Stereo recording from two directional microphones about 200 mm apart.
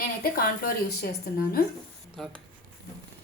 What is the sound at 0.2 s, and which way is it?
Speech, 50° left (ahead or behind).